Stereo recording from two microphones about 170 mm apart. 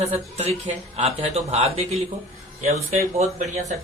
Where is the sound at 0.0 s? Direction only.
40° right (ahead or behind).